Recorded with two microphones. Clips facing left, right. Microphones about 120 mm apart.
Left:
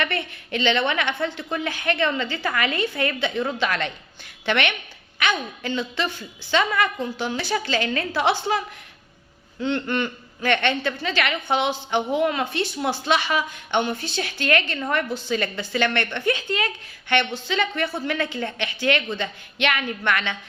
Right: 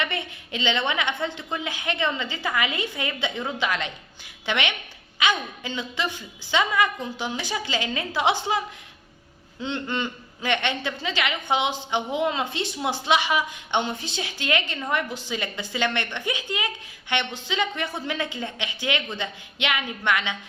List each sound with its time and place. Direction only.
0.0 s a woman's voice: 15° right (ahead or behind)